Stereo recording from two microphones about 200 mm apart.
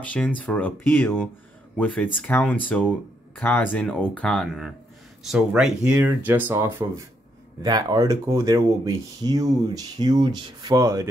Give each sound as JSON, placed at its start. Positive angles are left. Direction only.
{"t": 0.0, "sound": "speech", "side_deg": 5}